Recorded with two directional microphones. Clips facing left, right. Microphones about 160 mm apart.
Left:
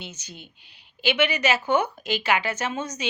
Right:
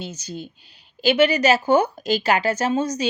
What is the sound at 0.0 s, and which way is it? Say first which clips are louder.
Speech: right 9 dB; 40° right (ahead or behind).